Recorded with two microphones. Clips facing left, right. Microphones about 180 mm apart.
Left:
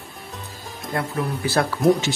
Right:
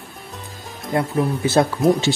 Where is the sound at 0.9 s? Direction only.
20° right (ahead or behind).